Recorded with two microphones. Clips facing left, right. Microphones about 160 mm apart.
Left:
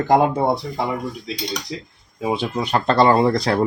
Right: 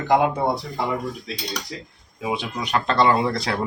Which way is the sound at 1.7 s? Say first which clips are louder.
Left 4 dB; 20° left (ahead or behind).